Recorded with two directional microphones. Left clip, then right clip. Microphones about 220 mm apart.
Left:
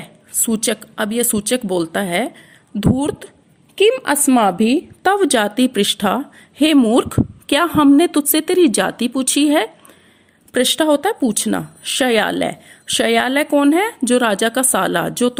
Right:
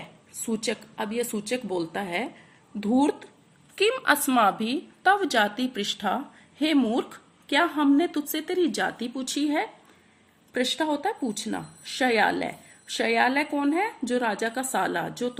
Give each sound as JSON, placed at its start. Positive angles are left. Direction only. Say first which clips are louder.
{"t": 0.4, "sound": "a woman's voice", "louder": "left 9 dB", "side_deg": 50}
{"t": 3.8, "sound": "a woman's voice", "louder": "left 8 dB", "side_deg": 35}